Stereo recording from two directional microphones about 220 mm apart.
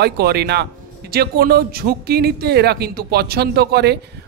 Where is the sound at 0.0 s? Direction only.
45° right (ahead or behind).